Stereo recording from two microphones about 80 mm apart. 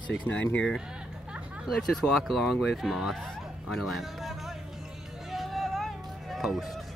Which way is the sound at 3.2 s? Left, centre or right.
Centre.